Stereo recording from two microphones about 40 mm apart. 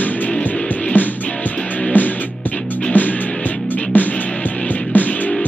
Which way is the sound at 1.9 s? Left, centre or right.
Left.